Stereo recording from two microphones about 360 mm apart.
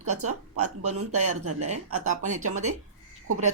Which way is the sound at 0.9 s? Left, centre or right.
Centre.